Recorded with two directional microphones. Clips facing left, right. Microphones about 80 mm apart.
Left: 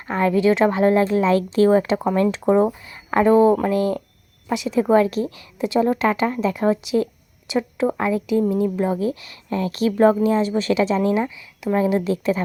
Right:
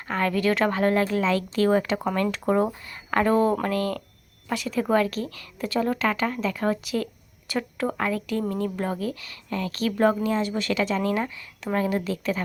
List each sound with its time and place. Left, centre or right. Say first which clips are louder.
0.1 s a woman's voice: left 6 dB; left
9.0 s a woman's voice: left 7 dB; left
11.1 s a woman's voice: left 5 dB; centre; by 12.4 s left